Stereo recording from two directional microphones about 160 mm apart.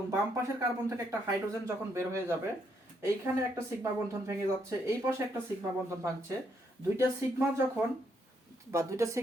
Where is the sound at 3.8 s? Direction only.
15° right (ahead or behind).